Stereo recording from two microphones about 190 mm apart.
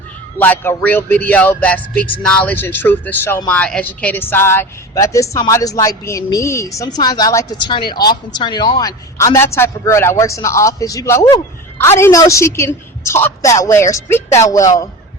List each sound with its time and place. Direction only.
0.3 s a woman's voice: 10° left (ahead or behind)